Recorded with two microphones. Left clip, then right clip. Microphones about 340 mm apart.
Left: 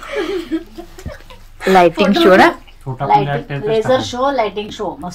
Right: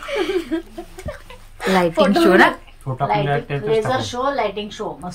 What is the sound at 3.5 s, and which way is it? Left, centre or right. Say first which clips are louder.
Speech: left 1 dB; centre.